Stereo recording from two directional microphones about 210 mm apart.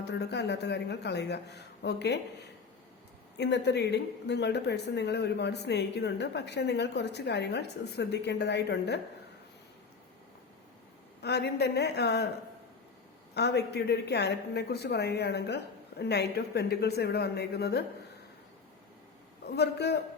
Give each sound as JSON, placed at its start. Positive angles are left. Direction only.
{"t": 0.0, "sound": "a woman's voice", "side_deg": 55}
{"t": 11.2, "sound": "a woman's voice", "side_deg": 50}
{"t": 13.3, "sound": "a woman's voice", "side_deg": 50}
{"t": 19.5, "sound": "a woman's voice", "side_deg": 50}